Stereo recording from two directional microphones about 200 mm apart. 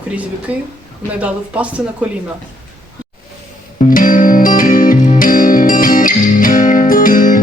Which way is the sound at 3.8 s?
45° left (ahead or behind).